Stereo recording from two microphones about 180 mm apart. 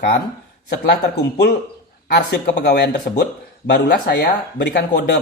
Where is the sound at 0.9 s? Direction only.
65° left (ahead or behind).